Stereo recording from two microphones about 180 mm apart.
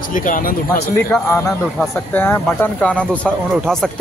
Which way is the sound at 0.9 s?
10° left (ahead or behind).